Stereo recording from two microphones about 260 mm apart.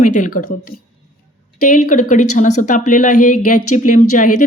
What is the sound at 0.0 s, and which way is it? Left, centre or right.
Speech, left.